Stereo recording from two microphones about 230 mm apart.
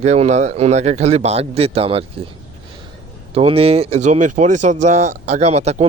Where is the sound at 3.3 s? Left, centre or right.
Right.